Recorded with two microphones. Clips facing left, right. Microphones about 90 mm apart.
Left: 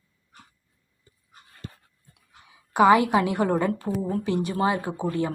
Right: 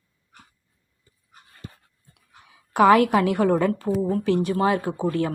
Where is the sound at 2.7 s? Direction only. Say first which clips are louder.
Right 2 dB; 5° left (ahead or behind).